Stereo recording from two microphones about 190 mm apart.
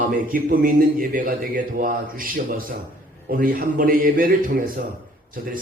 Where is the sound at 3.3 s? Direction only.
45° right (ahead or behind).